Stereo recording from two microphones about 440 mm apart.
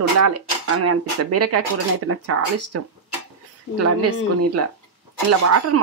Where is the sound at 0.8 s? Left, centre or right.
Right.